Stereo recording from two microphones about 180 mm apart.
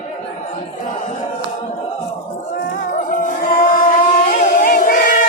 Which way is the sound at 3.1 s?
45° left (ahead or behind).